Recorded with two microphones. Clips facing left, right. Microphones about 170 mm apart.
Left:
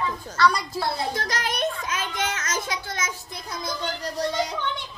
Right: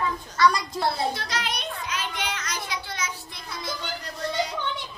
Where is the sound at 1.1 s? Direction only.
45° left (ahead or behind).